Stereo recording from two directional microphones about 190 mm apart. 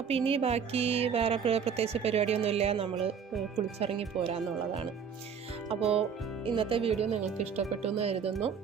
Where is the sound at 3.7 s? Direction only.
30° right (ahead or behind).